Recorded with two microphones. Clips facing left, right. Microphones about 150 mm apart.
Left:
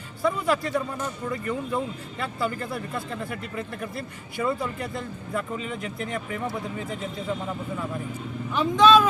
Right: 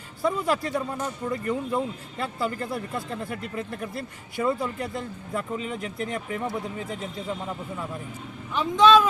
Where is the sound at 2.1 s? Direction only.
35° right (ahead or behind).